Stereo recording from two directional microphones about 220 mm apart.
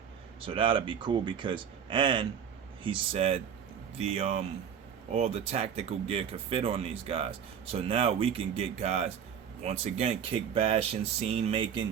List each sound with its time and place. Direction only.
0.4 s speech: 25° right (ahead or behind)